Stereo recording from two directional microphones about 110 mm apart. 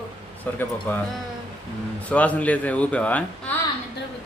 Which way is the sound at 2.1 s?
10° left (ahead or behind).